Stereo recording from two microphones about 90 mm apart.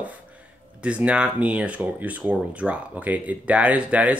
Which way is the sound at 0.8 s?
15° right (ahead or behind).